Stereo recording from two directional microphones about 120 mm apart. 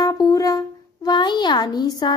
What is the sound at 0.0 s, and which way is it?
Brass instrument, 30° left (ahead or behind).